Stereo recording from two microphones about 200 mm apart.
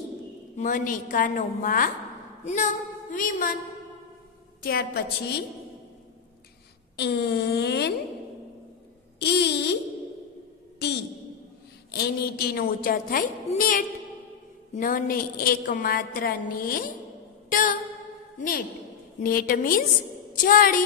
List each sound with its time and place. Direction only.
0.6 s a woman's voice: 40° left (ahead or behind)
4.6 s a woman's voice: 50° left (ahead or behind)
7.0 s speech: 55° left (ahead or behind)
9.2 s speech: 55° left (ahead or behind)
10.8 s a woman's voice: 55° left (ahead or behind)
17.5 s music: 40° left (ahead or behind)
19.1 s a woman's voice: 45° left (ahead or behind)